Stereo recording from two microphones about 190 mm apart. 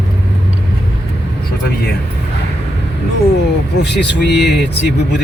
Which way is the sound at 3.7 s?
60° left (ahead or behind).